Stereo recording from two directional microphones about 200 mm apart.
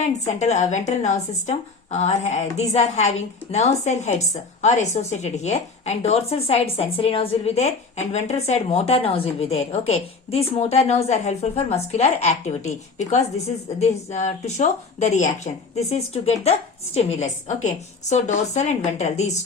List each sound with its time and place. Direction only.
0.0 s a woman's voice: 35° left (ahead or behind)